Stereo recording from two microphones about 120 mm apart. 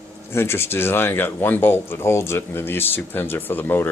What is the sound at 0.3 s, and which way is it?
Speech, 20° left (ahead or behind).